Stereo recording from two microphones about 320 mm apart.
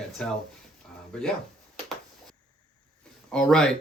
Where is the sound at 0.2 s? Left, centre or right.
Centre.